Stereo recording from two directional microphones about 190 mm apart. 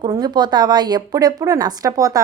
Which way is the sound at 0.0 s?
20° right (ahead or behind).